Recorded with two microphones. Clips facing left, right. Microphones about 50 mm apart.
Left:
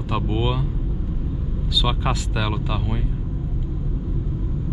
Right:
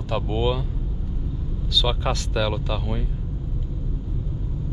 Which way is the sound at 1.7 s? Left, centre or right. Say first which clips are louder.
Even; centre.